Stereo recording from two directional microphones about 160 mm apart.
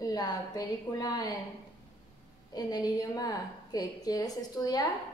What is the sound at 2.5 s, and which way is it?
A woman's voice, 25° left (ahead or behind).